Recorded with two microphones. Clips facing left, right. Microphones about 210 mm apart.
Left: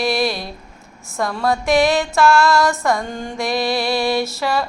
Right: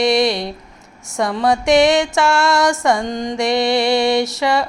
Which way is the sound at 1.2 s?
20° right (ahead or behind).